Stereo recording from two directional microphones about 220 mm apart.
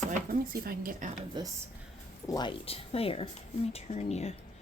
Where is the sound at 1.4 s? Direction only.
20° right (ahead or behind).